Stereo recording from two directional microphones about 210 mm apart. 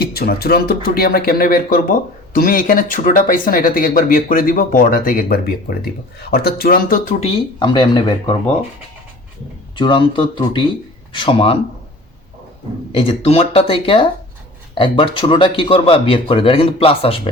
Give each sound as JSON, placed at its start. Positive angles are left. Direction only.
{"t": 0.0, "sound": "speech", "side_deg": 50}
{"t": 9.7, "sound": "speech", "side_deg": 20}
{"t": 12.9, "sound": "speech", "side_deg": 25}